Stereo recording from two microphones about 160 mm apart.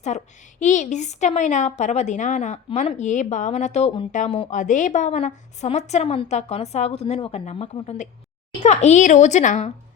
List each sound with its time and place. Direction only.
0.6 s a woman's voice: 50° left (ahead or behind)
4.1 s a woman's voice: 50° left (ahead or behind)